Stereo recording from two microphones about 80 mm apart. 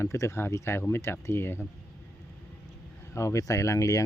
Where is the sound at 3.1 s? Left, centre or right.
Left.